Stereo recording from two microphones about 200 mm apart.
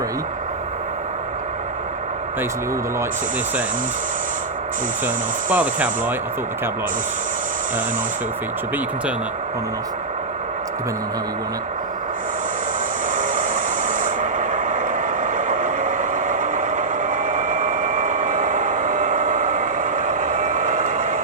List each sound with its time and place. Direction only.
5.0 s speech: 5° right (ahead or behind)
13.1 s vehicle: 40° right (ahead or behind)